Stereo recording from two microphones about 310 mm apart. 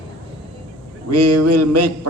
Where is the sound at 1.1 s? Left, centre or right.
Right.